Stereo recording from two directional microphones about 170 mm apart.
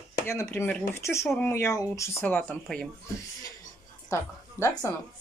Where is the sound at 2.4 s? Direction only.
Centre (ahead or behind).